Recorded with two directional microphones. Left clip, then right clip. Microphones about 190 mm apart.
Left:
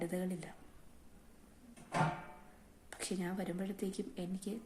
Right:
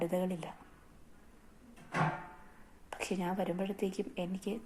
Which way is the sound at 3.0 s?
10° left (ahead or behind).